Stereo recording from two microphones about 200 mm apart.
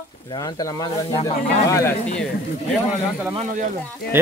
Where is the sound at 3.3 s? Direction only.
35° right (ahead or behind).